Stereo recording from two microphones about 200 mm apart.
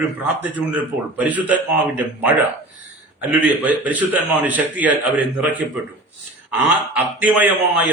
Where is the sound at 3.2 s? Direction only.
10° right (ahead or behind).